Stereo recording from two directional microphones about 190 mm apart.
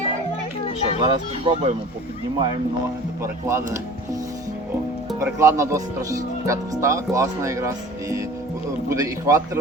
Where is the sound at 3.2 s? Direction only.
15° right (ahead or behind).